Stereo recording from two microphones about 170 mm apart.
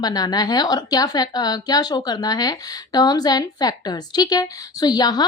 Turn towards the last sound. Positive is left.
turn(degrees=25)  # may be behind; listen again after turning